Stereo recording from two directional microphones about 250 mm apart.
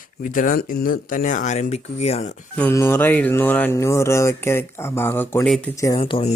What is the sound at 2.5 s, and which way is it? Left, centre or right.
Speech, centre.